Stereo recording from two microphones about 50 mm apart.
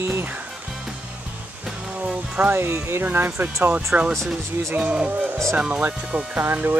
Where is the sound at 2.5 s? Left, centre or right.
Right.